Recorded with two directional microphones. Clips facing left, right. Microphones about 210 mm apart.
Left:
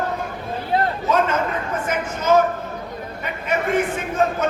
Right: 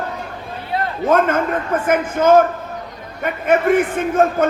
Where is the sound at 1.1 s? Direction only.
55° right (ahead or behind).